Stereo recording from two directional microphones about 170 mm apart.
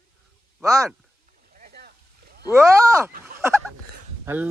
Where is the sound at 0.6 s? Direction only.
20° right (ahead or behind).